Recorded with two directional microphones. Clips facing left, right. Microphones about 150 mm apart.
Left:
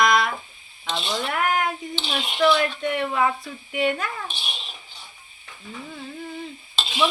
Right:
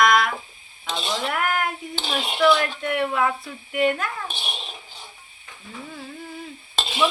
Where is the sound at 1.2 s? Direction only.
Centre (ahead or behind).